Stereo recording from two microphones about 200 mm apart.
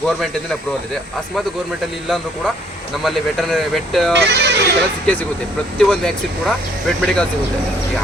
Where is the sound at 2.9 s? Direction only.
Centre (ahead or behind).